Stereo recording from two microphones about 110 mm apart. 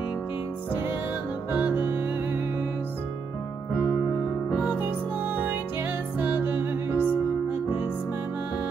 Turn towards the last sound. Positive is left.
turn(degrees=-20)  # may be behind; listen again after turning